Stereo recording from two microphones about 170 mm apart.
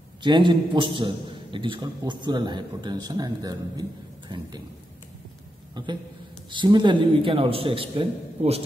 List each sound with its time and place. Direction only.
0.2 s a man's voice: 30° right (ahead or behind)
5.8 s a man's voice: 25° right (ahead or behind)